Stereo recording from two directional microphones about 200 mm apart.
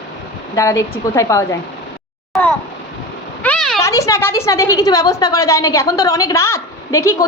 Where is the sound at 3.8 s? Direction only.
15° left (ahead or behind).